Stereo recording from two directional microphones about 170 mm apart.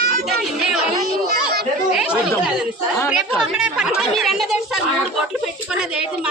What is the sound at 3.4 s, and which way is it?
Speech, 5° right (ahead or behind).